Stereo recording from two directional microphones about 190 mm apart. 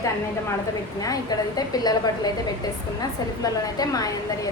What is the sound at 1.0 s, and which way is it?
A woman's voice, 20° left (ahead or behind).